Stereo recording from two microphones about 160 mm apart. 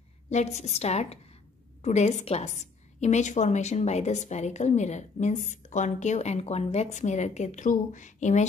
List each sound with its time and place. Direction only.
0.3 s a woman's voice: 45° left (ahead or behind)